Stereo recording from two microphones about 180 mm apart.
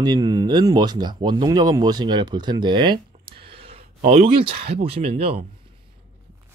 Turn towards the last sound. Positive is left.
turn(degrees=-30)  # may be behind; listen again after turning